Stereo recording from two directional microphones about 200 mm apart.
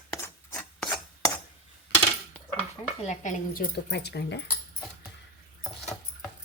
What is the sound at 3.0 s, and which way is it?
Speech, 35° left (ahead or behind).